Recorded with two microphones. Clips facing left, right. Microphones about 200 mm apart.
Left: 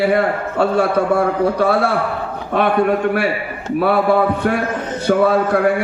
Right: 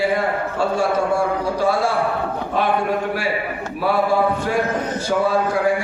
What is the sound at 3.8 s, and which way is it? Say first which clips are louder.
Speech: left 4 dB; 60° left (ahead or behind).